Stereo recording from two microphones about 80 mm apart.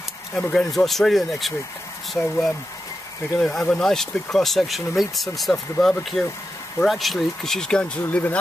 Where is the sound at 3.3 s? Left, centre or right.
Centre.